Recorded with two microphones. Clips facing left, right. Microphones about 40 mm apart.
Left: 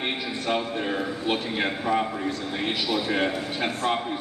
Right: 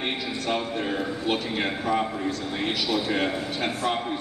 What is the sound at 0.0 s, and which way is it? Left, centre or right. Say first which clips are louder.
Music: even; centre.